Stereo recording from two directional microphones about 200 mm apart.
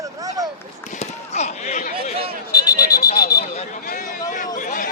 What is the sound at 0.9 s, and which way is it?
Basketball bounce, 35° left (ahead or behind).